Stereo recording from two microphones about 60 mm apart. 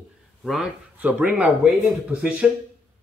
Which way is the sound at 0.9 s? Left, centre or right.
Right.